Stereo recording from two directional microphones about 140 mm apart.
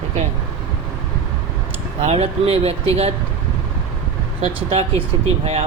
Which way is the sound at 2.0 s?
45° right (ahead or behind).